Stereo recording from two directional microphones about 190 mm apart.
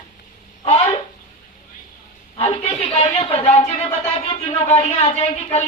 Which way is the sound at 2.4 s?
30° left (ahead or behind).